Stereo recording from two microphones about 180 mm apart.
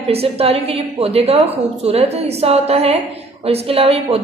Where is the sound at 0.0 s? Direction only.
35° right (ahead or behind).